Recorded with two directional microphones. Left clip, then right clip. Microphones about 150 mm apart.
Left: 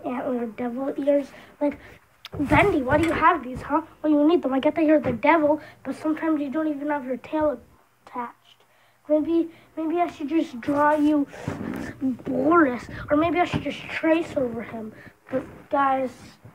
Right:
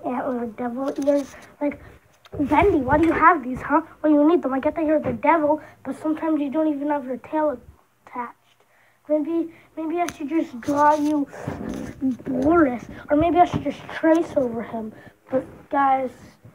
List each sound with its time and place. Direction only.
0.0 s a sound: 5° left (ahead or behind)
0.3 s speech: 15° left (ahead or behind)
4.5 s a woman's voice: 35° left (ahead or behind)
5.5 s speech: 10° left (ahead or behind)
5.9 s speech: centre (ahead or behind)
7.2 s speech: 20° left (ahead or behind)
9.1 s speech: 10° left (ahead or behind)
10.2 s speech: 10° left (ahead or behind)
11.3 s speech: 15° right (ahead or behind)
11.8 s speech: 5° right (ahead or behind)